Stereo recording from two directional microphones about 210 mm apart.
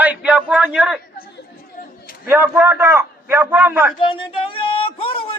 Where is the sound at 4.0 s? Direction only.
25° left (ahead or behind).